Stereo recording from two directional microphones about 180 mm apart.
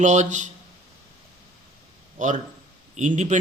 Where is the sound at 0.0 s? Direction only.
45° right (ahead or behind).